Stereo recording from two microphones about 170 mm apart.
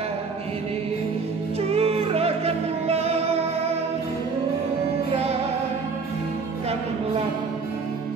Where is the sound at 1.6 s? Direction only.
35° right (ahead or behind).